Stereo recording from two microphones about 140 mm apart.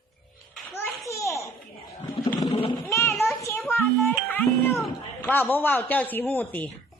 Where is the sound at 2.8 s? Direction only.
20° left (ahead or behind).